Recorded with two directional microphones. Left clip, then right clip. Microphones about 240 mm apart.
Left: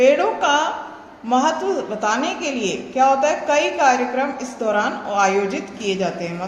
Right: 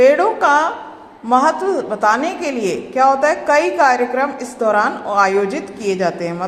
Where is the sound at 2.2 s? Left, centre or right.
Right.